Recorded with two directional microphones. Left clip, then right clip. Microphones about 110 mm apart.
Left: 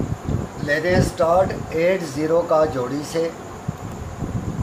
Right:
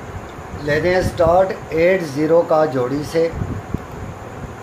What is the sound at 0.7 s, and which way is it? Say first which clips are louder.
Speech: right 3 dB; 85° right.